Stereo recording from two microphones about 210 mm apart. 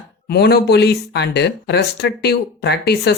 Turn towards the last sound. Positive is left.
turn(degrees=50)  # may be behind; listen again after turning